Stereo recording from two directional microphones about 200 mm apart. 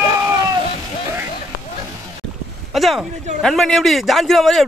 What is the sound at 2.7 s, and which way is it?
A man's voice, centre (ahead or behind).